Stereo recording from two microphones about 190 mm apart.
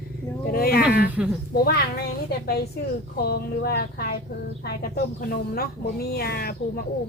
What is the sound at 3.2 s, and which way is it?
Speech, 55° left (ahead or behind).